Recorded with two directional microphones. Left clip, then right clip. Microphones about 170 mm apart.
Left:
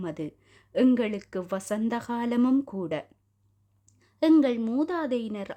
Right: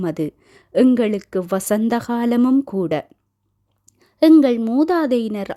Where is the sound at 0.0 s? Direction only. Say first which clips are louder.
Right 11 dB; 35° right (ahead or behind).